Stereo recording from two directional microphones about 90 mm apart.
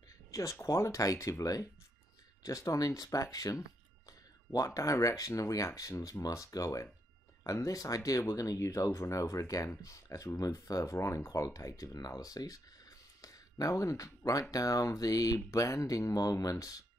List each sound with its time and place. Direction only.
0.3 s speech: 35° left (ahead or behind)
4.6 s speech: 40° left (ahead or behind)